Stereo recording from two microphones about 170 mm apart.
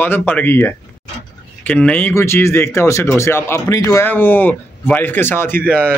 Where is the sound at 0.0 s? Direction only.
10° left (ahead or behind).